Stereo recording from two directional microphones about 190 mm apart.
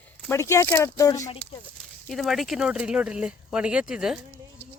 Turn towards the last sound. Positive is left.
turn(degrees=-5)  # may be behind; listen again after turning